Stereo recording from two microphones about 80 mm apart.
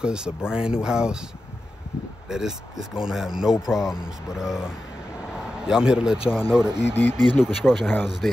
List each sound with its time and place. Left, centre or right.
0.0 s speech: centre
2.2 s speech: centre
6.9 s speech: left
7.3 s speech: centre